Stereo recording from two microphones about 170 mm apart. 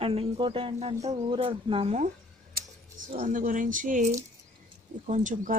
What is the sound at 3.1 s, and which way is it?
Speech, 50° right (ahead or behind).